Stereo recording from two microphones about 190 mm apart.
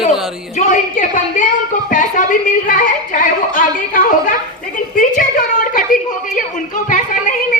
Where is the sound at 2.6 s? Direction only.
45° left (ahead or behind).